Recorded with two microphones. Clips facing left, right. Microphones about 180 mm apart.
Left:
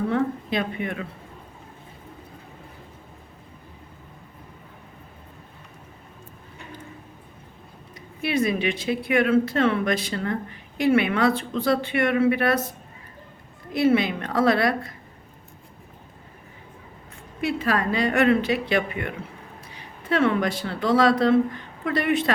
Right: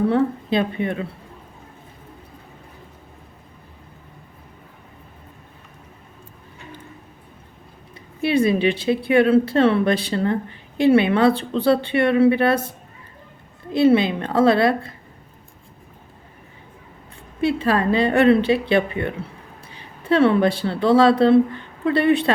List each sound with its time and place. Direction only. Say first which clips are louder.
0.1 s speech: right 5 dB; 30° right (ahead or behind)
7.9 s speech: right 5 dB; 30° right (ahead or behind)
13.7 s speech: right 4 dB; 30° right (ahead or behind)
17.4 s speech: right 5 dB; 30° right (ahead or behind)